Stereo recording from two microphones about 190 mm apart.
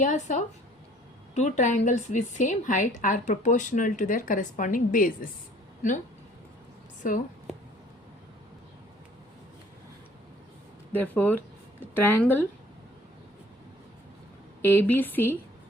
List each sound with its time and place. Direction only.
0.0 s a woman's voice: 40° left (ahead or behind)
10.9 s a woman's voice: 10° left (ahead or behind)
14.6 s a woman's voice: 10° left (ahead or behind)